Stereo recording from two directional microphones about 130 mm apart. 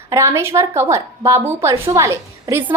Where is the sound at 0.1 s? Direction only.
20° right (ahead or behind).